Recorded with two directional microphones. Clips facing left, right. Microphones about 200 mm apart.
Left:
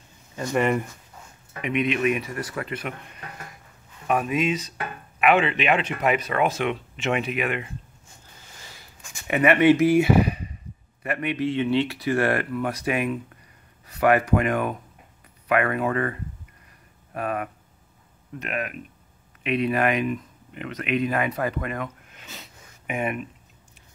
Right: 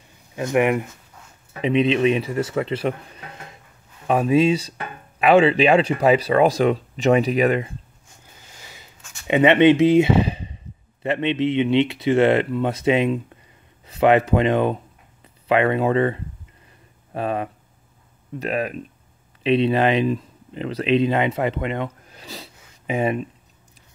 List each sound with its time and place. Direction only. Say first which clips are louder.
0.6 s speech: right 4 dB; 15° right (ahead or behind)
1.6 s speech: right 6 dB; 30° right (ahead or behind)
4.1 s speech: right 6 dB; 30° right (ahead or behind)
9.3 s speech: right 4 dB; 25° right (ahead or behind)